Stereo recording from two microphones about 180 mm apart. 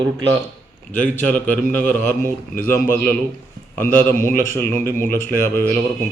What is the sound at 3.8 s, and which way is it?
A man's voice, 10° left (ahead or behind).